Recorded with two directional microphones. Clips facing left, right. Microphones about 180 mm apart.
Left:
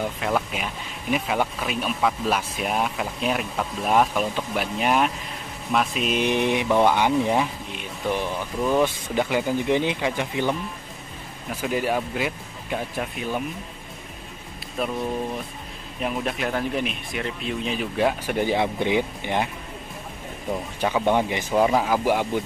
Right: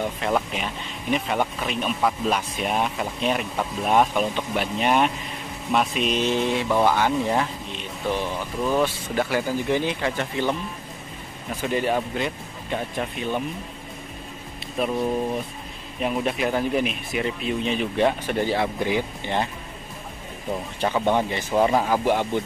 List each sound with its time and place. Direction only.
0.0 s speech: centre (ahead or behind)
6.2 s speech: 15° left (ahead or behind)
11.6 s speech: 5° left (ahead or behind)
14.8 s speech: centre (ahead or behind)
16.0 s speech: centre (ahead or behind)
20.8 s speech: 10° left (ahead or behind)
21.5 s speech: centre (ahead or behind)